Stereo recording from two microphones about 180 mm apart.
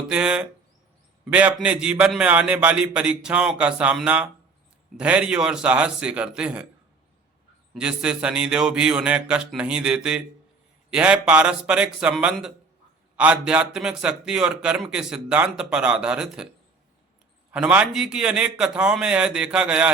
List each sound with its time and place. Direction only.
0.1 s a man's voice: 5° right (ahead or behind)
7.7 s a man's voice: 5° right (ahead or behind)
17.5 s a man's voice: 5° right (ahead or behind)